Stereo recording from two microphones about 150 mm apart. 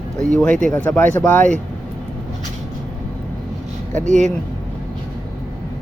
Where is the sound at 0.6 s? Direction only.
10° left (ahead or behind).